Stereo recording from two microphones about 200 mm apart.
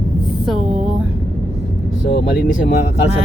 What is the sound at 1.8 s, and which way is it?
Vehicle, 55° left (ahead or behind).